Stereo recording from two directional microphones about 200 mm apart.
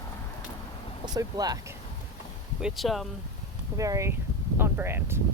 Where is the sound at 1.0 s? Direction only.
20° right (ahead or behind).